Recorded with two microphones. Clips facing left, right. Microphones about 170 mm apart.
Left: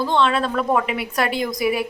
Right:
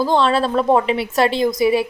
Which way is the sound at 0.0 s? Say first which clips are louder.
Right 3 dB; 35° right (ahead or behind).